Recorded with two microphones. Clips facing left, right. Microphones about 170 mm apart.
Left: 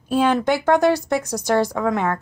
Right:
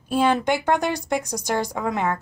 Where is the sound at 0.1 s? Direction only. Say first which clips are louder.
Left 2 dB; 10° right (ahead or behind).